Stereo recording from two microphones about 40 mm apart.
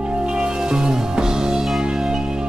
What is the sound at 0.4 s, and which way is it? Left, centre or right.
Music, right.